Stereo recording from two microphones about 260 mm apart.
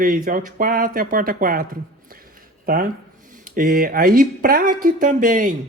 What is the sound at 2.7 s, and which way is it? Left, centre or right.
Speech, right.